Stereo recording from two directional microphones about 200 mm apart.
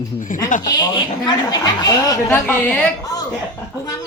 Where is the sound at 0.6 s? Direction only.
20° left (ahead or behind).